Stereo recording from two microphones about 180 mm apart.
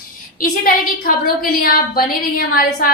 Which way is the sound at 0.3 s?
50° left (ahead or behind).